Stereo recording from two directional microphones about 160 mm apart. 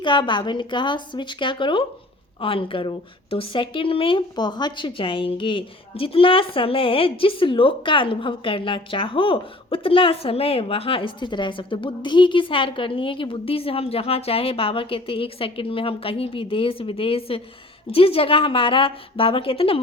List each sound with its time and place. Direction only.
0.0 s a woman's voice: 30° left (ahead or behind)